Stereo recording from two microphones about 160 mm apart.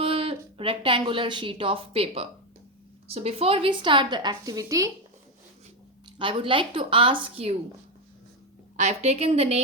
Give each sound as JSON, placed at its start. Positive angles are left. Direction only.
{"t": 0.0, "sound": "a woman's voice", "side_deg": -35}
{"t": 6.1, "sound": "a woman's voice", "side_deg": -30}
{"t": 8.7, "sound": "a woman's voice", "side_deg": -45}